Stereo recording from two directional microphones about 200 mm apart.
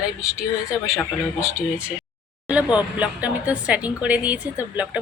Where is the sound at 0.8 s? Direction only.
15° left (ahead or behind).